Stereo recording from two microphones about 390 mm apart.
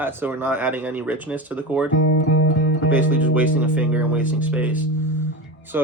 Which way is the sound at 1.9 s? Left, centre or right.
Left.